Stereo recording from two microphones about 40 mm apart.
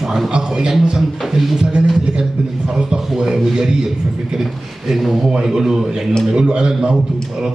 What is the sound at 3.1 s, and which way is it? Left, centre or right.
Speech, centre.